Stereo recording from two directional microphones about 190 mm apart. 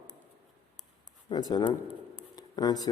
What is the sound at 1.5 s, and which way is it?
Speech, 20° left (ahead or behind).